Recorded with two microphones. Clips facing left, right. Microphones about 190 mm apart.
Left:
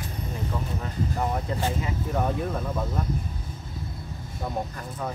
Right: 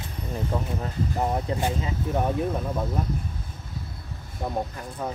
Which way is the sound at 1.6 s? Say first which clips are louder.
Right 1 dB; 15° right (ahead or behind).